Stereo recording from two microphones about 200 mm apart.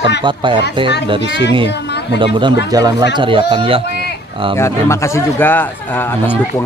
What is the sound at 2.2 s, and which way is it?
Speech, 25° right (ahead or behind).